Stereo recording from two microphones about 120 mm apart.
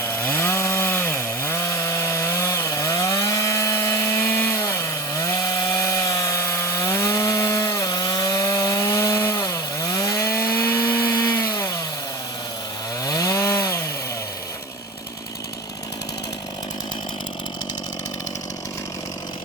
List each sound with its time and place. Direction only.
0.0 s chainsaw: 20° left (ahead or behind); by 11.6 s 35° left (ahead or behind)
13.1 s chainsaw: 30° left (ahead or behind)